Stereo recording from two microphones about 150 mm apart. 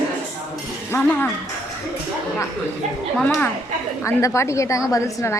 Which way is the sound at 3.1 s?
5° left (ahead or behind).